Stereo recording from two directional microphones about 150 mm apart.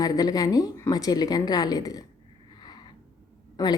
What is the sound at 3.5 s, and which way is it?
Speech, 25° left (ahead or behind).